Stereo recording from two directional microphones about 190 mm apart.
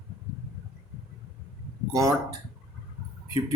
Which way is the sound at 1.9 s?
15° right (ahead or behind).